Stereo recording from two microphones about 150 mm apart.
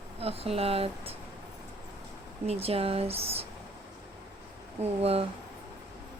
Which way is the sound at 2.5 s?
40° right (ahead or behind).